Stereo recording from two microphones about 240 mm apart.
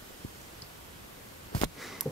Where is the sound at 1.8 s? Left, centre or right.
Centre.